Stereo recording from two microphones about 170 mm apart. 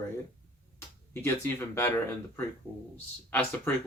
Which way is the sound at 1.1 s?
15° left (ahead or behind).